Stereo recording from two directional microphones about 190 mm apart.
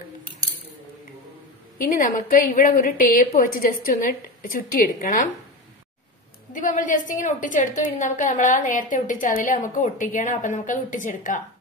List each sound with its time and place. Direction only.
1.8 s a woman's voice: 45° left (ahead or behind)
6.5 s a woman's voice: 45° left (ahead or behind)